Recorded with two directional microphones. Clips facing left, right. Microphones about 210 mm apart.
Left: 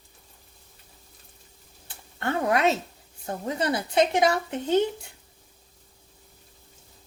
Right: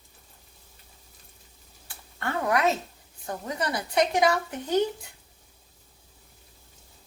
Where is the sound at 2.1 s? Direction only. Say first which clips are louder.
Left 2 dB; 25° left (ahead or behind).